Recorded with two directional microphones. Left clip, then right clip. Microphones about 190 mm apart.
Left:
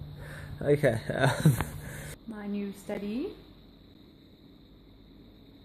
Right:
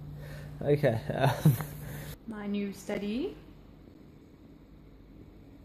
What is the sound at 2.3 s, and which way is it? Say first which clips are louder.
Speech: right 2 dB; 10° right (ahead or behind).